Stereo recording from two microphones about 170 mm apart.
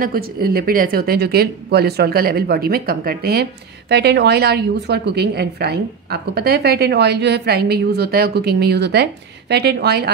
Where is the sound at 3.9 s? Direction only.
80° right.